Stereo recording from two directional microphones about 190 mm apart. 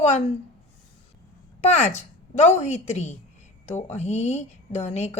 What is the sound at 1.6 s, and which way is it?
A woman's voice, 35° left (ahead or behind).